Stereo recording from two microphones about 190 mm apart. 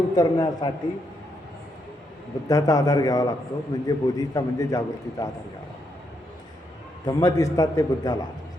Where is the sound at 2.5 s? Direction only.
20° left (ahead or behind).